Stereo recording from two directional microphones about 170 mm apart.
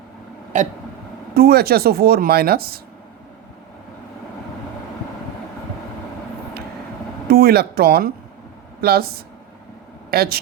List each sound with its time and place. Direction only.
1.3 s speech: 65° right (ahead or behind)
7.3 s speech: 65° right (ahead or behind)